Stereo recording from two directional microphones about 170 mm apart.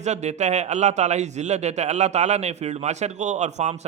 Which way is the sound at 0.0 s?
40° right (ahead or behind).